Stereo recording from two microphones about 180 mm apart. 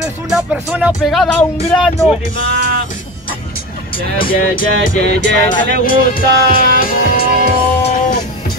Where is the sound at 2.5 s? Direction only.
70° right (ahead or behind).